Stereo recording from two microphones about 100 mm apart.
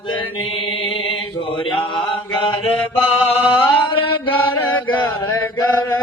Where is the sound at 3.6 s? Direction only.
60° left (ahead or behind).